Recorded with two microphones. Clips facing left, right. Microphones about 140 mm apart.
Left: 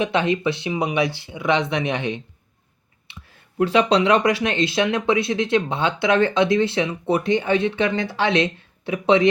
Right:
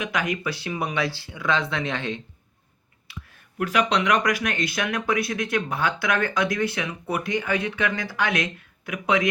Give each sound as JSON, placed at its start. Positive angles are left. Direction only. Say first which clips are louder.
{"t": 0.0, "sound": "speech", "louder": "left 7 dB", "side_deg": 30}
{"t": 3.1, "sound": "a sound", "louder": "right 4 dB", "side_deg": 25}
{"t": 3.6, "sound": "speech", "louder": "left 6 dB", "side_deg": 30}